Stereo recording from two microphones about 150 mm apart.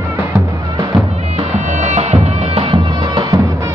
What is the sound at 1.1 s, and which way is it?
Music, 45° right (ahead or behind).